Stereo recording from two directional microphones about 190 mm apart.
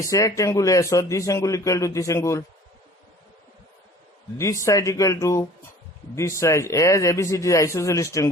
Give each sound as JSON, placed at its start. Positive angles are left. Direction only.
{"t": 0.0, "sound": "a man's voice", "side_deg": 15}
{"t": 4.4, "sound": "a man's voice", "side_deg": 15}